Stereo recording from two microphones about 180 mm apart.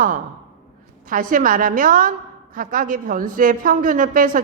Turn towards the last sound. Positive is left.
turn(degrees=-50)  # may be behind; listen again after turning